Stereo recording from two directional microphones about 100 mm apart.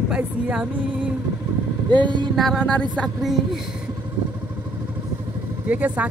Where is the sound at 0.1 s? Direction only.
10° right (ahead or behind).